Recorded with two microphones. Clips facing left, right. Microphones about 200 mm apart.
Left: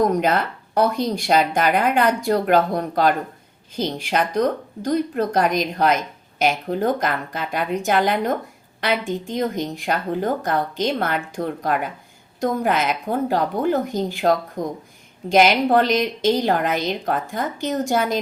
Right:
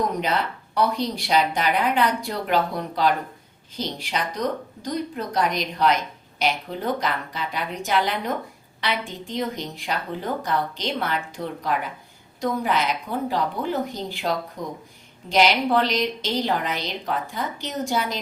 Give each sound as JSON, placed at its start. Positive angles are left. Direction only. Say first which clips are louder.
{"t": 0.2, "sound": "speech", "louder": "left 5 dB", "side_deg": 50}